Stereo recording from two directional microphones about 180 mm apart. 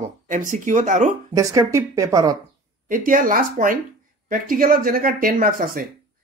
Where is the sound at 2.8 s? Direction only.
50° right (ahead or behind).